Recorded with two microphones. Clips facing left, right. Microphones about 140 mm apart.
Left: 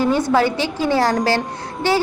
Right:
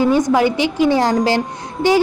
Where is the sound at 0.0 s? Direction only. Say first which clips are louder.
Right 3 dB; 15° right (ahead or behind).